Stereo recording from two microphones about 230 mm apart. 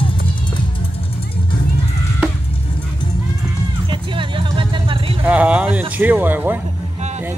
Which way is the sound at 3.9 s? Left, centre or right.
Right.